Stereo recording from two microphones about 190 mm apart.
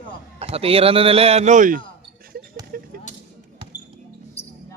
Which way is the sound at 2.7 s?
50° right (ahead or behind).